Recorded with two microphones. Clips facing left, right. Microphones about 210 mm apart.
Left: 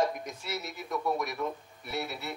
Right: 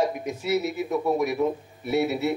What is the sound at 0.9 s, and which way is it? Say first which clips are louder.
Speech: right 6 dB; 25° right (ahead or behind).